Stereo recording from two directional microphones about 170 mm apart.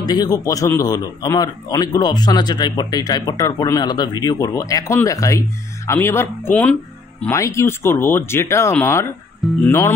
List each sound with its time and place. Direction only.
0.0 s a man's voice: 25° left (ahead or behind)